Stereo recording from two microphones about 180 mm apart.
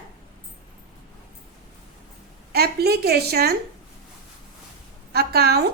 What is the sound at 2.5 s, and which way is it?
A woman's voice, 60° right (ahead or behind).